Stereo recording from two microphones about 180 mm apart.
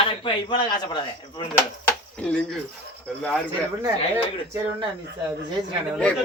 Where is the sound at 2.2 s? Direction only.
5° left (ahead or behind).